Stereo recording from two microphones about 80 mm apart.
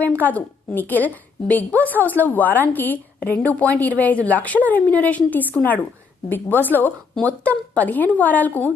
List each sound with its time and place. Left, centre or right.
0.0 s a woman's voice: centre